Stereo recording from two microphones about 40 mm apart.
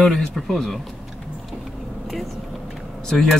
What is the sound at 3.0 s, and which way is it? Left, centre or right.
Speech, centre.